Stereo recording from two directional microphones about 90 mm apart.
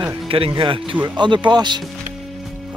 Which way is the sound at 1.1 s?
60° right (ahead or behind).